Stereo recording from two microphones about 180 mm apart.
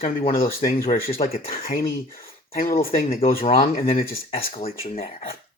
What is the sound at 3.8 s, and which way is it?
Speech, 35° left (ahead or behind).